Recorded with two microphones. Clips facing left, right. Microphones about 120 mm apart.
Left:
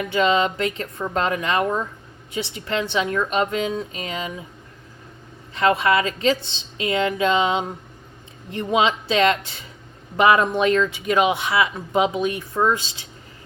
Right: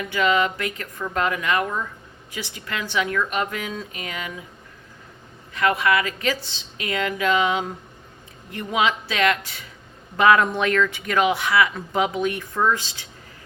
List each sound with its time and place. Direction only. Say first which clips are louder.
0.1 s speech: left 1 dB; 25° left (ahead or behind)
5.5 s speech: left 2 dB; 25° left (ahead or behind)